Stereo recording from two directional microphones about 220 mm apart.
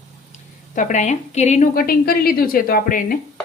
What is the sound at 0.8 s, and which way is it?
A woman's voice, 35° left (ahead or behind).